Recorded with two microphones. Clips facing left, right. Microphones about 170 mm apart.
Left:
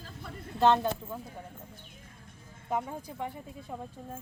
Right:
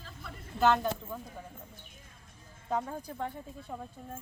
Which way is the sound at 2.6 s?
10° left (ahead or behind).